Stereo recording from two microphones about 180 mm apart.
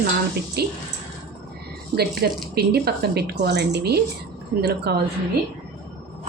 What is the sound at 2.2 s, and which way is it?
Speech, 60° right (ahead or behind).